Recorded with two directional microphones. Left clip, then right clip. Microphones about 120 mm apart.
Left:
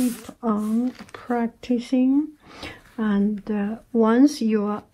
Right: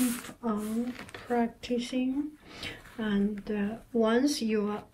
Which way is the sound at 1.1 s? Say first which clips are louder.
Left 2 dB; 35° left (ahead or behind).